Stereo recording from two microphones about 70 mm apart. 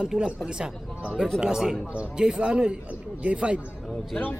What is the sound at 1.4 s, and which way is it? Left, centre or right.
Speech, centre.